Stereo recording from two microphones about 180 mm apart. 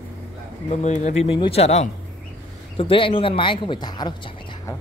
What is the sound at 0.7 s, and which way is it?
A man's voice, 40° left (ahead or behind).